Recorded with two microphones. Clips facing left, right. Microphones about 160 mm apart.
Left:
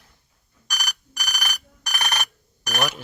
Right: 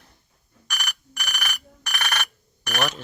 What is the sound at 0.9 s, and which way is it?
Alarm clock, 35° left (ahead or behind).